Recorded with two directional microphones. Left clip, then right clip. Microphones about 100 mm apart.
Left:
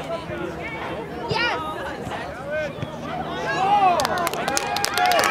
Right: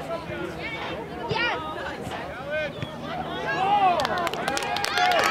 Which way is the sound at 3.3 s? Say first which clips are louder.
Left 3 dB; 25° left (ahead or behind).